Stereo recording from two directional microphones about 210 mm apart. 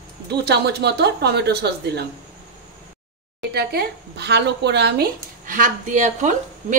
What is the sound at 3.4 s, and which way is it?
Speech, 50° right (ahead or behind).